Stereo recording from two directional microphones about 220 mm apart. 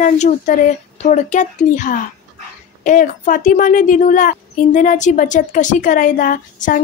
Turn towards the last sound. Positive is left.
turn(degrees=40)  # may be behind; listen again after turning